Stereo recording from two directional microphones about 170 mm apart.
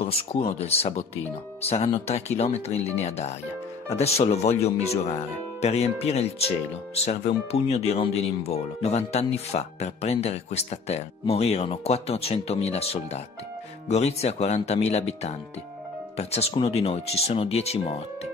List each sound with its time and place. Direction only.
0.0 s speech: 35° left (ahead or behind)